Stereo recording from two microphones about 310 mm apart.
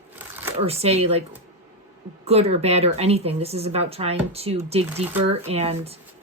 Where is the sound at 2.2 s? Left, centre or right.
Centre.